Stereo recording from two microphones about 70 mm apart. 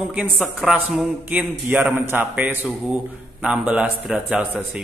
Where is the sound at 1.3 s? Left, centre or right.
Centre.